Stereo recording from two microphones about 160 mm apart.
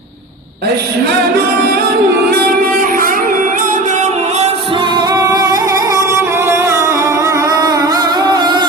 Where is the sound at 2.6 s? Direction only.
60° right (ahead or behind).